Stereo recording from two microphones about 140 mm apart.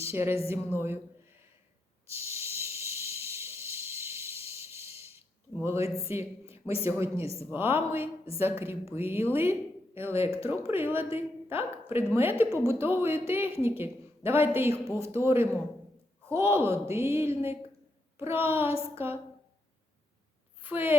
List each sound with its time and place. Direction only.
0.0 s a woman's voice: 15° right (ahead or behind)
0.8 s a sound: 15° right (ahead or behind)
2.0 s snake: 20° right (ahead or behind)
4.4 s snort: 20° right (ahead or behind)
5.6 s a woman's voice: 20° right (ahead or behind)
20.6 s a sound: 15° right (ahead or behind)